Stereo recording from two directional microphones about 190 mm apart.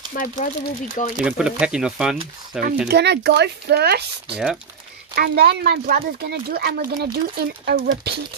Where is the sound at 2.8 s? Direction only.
60° right (ahead or behind).